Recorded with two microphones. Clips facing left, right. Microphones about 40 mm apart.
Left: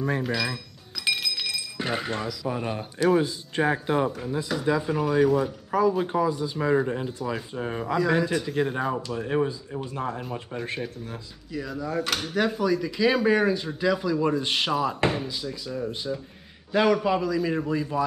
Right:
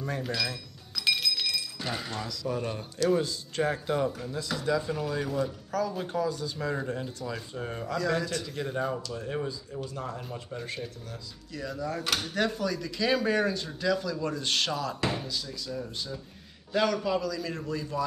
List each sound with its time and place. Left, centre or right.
0.2 s chink: centre
1.8 s speech: left
8.7 s speech: left
11.5 s speech: centre